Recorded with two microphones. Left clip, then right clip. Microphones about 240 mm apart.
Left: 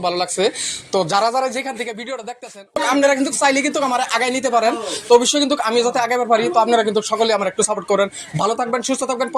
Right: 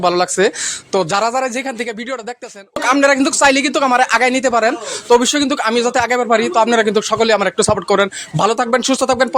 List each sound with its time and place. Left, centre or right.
0.0 s speech: right